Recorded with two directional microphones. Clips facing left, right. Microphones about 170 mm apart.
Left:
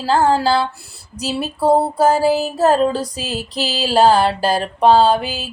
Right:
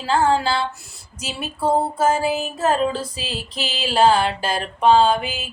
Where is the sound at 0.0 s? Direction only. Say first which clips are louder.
Left 3 dB; 35° left (ahead or behind).